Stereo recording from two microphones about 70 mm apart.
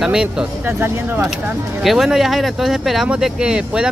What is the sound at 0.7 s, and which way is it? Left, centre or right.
Speech, right.